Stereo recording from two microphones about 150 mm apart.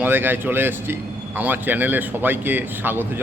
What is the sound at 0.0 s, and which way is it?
A man's voice, 15° right (ahead or behind).